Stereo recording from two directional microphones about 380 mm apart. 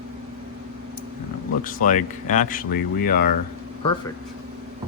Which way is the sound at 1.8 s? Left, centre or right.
Centre.